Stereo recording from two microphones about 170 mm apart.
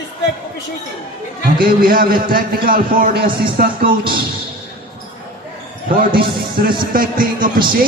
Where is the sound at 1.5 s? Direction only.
60° right (ahead or behind).